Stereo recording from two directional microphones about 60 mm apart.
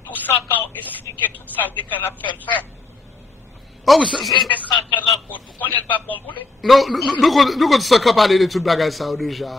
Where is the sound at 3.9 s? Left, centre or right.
Centre.